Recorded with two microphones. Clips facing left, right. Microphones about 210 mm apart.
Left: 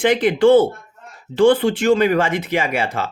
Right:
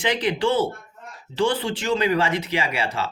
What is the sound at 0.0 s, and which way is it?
Speech, 50° left (ahead or behind).